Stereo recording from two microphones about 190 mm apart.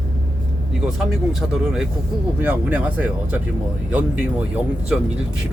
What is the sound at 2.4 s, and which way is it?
Speech, 10° right (ahead or behind).